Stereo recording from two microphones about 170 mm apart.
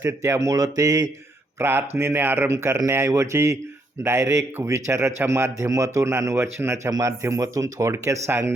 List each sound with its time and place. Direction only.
0.0 s speech: 15° right (ahead or behind)